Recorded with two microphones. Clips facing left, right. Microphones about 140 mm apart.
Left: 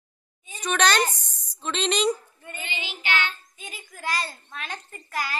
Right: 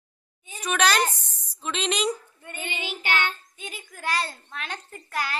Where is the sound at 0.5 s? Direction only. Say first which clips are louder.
Left 1 dB; 5° right (ahead or behind).